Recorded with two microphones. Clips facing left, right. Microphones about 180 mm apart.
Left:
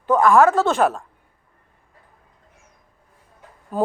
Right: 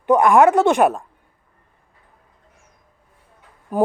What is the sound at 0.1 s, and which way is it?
Speech, 20° right (ahead or behind).